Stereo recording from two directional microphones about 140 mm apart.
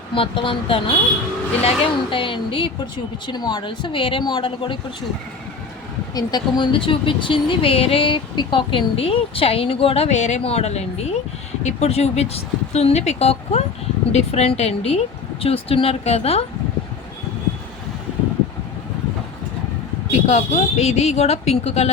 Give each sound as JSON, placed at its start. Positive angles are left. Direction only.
{"t": 0.1, "sound": "speech", "side_deg": 40}
{"t": 6.1, "sound": "a woman's voice", "side_deg": 30}
{"t": 20.2, "sound": "a woman's voice", "side_deg": 55}